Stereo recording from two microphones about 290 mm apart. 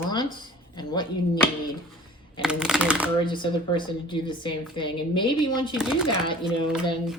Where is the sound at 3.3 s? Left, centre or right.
Centre.